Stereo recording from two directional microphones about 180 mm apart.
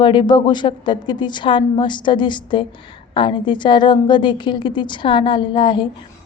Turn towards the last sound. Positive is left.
turn(degrees=25)  # may be behind; listen again after turning